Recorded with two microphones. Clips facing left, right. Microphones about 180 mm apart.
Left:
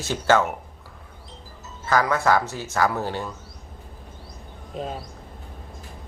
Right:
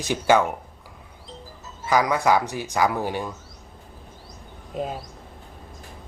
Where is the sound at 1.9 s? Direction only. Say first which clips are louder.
Right 1 dB; 15° right (ahead or behind).